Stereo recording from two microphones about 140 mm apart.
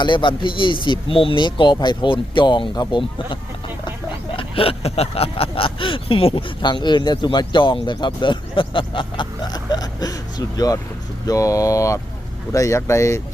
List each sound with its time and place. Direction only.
0.0 s speech: 35° left (ahead or behind)
4.4 s speech: 40° left (ahead or behind); by 13.2 s 20° left (ahead or behind)